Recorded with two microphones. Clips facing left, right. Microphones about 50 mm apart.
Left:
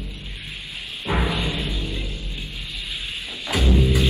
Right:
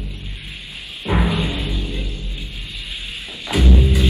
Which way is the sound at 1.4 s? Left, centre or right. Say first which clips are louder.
Right 2 dB; right.